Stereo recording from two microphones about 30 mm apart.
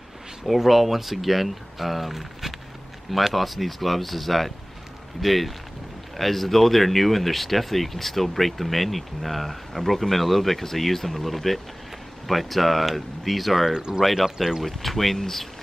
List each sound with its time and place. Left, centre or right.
0.6 s speech: centre
13.7 s speech: right
14.0 s speech: centre
14.6 s speech: centre